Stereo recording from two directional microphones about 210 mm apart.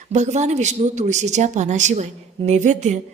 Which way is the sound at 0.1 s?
35° right (ahead or behind).